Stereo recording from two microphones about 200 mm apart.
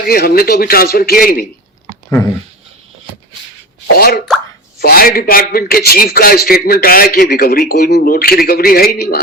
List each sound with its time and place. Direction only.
0.1 s a man's voice: 50° left (ahead or behind)
3.9 s a man's voice: 50° left (ahead or behind)